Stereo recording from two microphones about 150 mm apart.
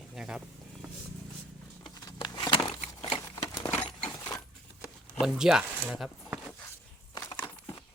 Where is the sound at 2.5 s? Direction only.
40° left (ahead or behind).